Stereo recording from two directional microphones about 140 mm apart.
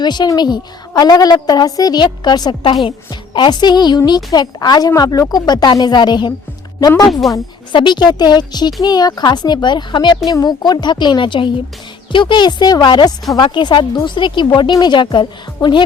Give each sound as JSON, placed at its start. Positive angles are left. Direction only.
{"t": 0.0, "sound": "a woman's voice", "side_deg": 30}
{"t": 7.1, "sound": "a woman's voice", "side_deg": 0}
{"t": 7.7, "sound": "a woman's voice", "side_deg": 35}